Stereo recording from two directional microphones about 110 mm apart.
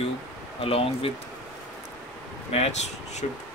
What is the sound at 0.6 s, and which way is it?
Speech, 60° left (ahead or behind).